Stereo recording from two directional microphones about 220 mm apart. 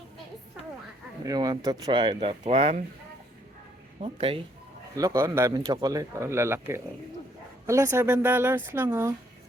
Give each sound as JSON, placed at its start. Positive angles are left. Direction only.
{"t": 1.2, "sound": "speech", "side_deg": -15}
{"t": 4.0, "sound": "speech", "side_deg": -25}
{"t": 4.9, "sound": "speech", "side_deg": -15}